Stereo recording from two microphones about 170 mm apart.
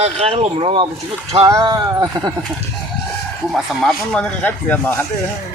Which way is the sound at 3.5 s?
Centre (ahead or behind).